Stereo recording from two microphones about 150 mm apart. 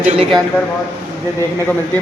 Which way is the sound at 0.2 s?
Centre (ahead or behind).